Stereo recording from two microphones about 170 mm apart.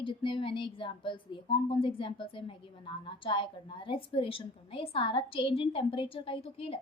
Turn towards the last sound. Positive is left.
turn(degrees=30)  # may be behind; listen again after turning